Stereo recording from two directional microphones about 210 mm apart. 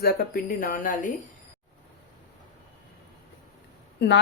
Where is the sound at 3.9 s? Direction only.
55° left (ahead or behind).